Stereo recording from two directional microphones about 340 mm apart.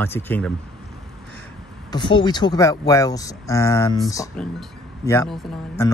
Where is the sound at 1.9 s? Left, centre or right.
Centre.